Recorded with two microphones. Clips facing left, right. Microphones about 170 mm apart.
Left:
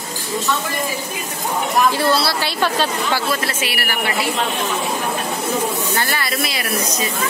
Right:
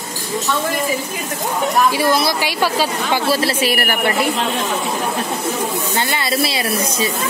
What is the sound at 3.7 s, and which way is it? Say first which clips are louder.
Speech: right 5 dB; 50° right (ahead or behind).